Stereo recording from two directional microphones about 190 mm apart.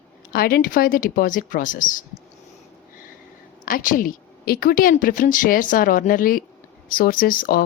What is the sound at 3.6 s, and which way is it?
A woman's voice, 45° left (ahead or behind).